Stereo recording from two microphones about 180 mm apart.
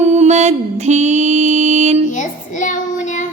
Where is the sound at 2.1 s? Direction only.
45° left (ahead or behind).